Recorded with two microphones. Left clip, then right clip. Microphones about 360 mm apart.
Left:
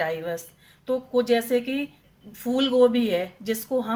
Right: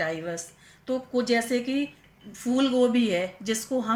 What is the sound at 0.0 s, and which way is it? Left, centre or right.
A woman's voice, left.